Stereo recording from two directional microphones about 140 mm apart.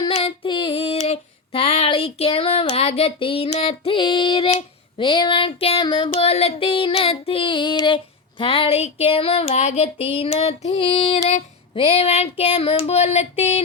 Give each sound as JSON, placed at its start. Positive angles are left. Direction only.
{"t": 0.1, "sound": "female singing", "side_deg": 45}
{"t": 3.5, "sound": "child singing", "side_deg": 45}
{"t": 6.1, "sound": "female singing", "side_deg": 50}